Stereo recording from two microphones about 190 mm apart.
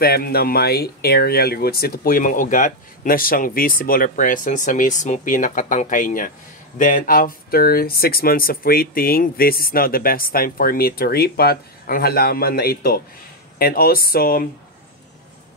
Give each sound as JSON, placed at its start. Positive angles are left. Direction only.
{"t": 0.0, "sound": "speech", "side_deg": 55}